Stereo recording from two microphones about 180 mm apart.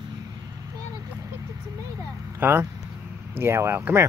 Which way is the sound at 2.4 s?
10° right (ahead or behind).